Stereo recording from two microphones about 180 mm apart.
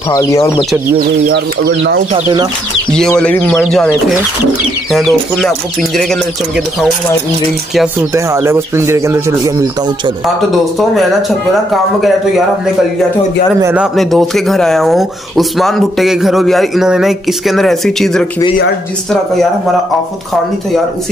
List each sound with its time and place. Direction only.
0.1 s speech: 20° left (ahead or behind)
0.9 s speech: 60° right (ahead or behind)
2.1 s speech: 30° right (ahead or behind)
2.9 s speech: 5° left (ahead or behind)
4.9 s speech: centre (ahead or behind)
8.1 s speech: 15° right (ahead or behind)
10.8 s speech: centre (ahead or behind)
13.7 s speech: centre (ahead or behind)